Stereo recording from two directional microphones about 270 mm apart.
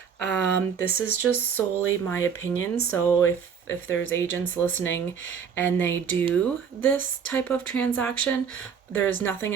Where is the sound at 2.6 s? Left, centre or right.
Left.